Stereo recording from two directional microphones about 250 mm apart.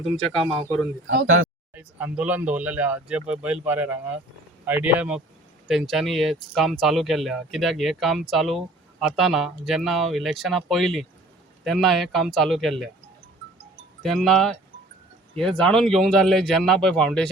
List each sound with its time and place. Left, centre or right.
1.0 s speech: right
1.7 s speech: centre
14.0 s speech: centre